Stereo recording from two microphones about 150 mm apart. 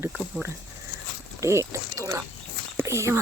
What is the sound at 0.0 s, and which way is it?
Speech, 5° right (ahead or behind).